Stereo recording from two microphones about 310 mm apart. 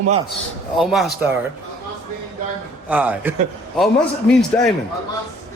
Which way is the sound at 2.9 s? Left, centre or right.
Centre.